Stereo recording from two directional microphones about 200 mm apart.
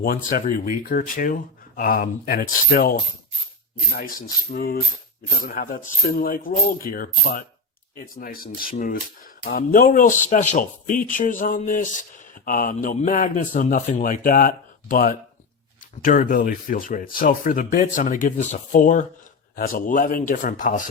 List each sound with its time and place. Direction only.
0.0 s speech: 45° left (ahead or behind)
4.5 s speech: 50° left (ahead or behind)